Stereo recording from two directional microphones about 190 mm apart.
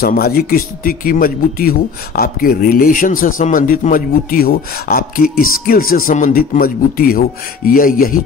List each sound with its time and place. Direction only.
0.0 s speech: 50° left (ahead or behind)